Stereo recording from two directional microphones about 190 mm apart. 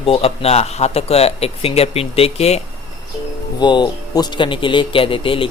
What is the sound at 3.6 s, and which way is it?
Speech, 25° left (ahead or behind).